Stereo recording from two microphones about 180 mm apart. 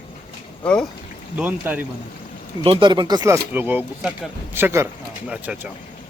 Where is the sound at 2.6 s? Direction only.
30° right (ahead or behind); by 5.7 s 5° right (ahead or behind).